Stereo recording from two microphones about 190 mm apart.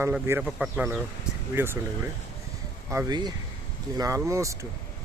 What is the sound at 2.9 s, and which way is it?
A man's voice, 20° right (ahead or behind).